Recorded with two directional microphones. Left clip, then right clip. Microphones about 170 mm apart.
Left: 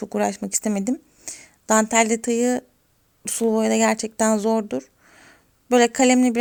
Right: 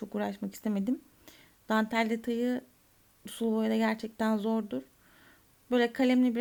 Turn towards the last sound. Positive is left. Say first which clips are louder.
# left 10 dB
turn(degrees=25)  # may be behind; listen again after turning